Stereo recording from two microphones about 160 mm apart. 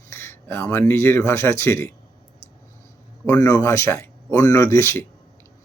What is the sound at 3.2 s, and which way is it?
Speech, 20° left (ahead or behind).